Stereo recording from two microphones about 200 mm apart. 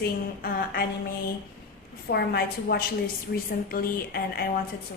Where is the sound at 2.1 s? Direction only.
55° left (ahead or behind).